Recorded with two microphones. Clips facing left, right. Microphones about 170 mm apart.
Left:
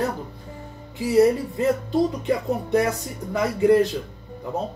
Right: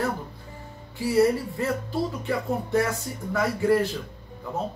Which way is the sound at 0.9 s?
20° left (ahead or behind).